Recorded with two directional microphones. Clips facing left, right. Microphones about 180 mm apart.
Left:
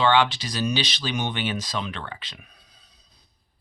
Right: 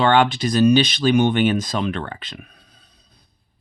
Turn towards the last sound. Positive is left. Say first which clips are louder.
# right 4 dB
turn(degrees=-55)  # may be behind; listen again after turning